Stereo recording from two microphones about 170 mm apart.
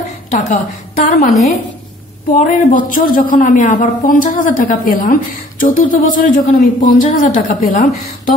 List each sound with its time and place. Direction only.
0.3 s speech: 50° left (ahead or behind)
2.3 s speech: 50° left (ahead or behind)